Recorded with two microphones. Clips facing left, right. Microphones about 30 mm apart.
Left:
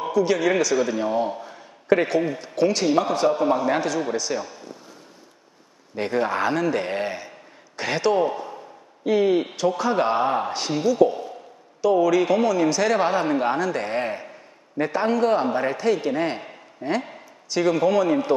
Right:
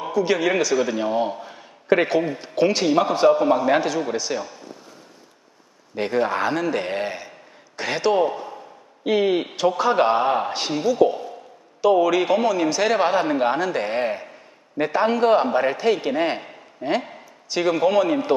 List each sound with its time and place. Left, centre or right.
0.0 s a man's voice: centre
5.9 s a man's voice: centre
9.0 s a man's voice: right